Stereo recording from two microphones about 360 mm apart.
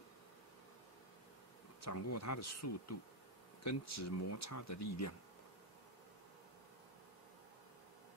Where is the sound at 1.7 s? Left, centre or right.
Left.